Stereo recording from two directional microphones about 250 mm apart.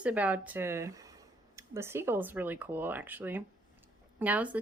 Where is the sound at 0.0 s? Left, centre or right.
Centre.